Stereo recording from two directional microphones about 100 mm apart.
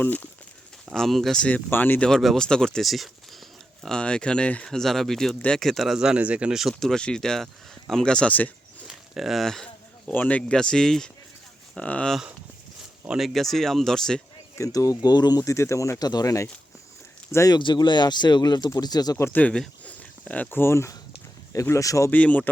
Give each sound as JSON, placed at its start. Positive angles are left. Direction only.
{"t": 0.0, "sound": "speech", "side_deg": 20}
{"t": 0.9, "sound": "speech", "side_deg": 0}
{"t": 2.0, "sound": "speech", "side_deg": 5}
{"t": 8.9, "sound": "speech", "side_deg": 0}
{"t": 10.1, "sound": "speech", "side_deg": 15}
{"t": 13.1, "sound": "speech", "side_deg": 0}
{"t": 14.6, "sound": "speech", "side_deg": 35}
{"t": 17.6, "sound": "speech", "side_deg": 50}
{"t": 19.2, "sound": "speech", "side_deg": 15}
{"t": 22.1, "sound": "speech", "side_deg": 15}